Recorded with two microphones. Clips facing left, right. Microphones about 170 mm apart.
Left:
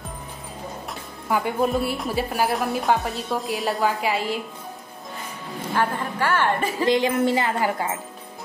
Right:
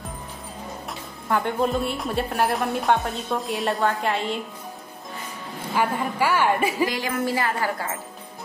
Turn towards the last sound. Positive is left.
turn(degrees=20)  # may be behind; listen again after turning